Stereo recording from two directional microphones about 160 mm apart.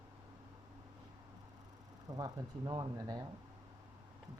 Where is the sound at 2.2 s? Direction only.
25° right (ahead or behind).